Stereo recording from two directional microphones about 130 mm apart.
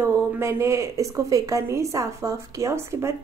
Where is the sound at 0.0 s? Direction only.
20° right (ahead or behind).